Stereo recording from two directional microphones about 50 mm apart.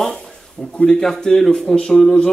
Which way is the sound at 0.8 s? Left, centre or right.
Centre.